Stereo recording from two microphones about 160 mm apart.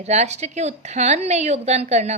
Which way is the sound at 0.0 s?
45° right (ahead or behind).